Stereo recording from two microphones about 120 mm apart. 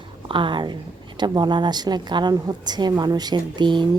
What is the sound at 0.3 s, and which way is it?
A woman's voice, 45° right (ahead or behind).